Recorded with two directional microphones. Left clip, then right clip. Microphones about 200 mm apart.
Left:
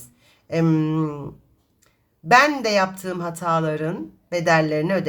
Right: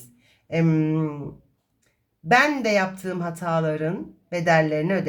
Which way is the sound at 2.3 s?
35° left (ahead or behind).